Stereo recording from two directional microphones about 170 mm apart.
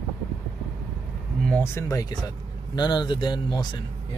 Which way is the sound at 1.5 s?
15° left (ahead or behind).